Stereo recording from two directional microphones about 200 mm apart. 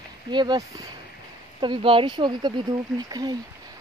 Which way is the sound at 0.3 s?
20° right (ahead or behind).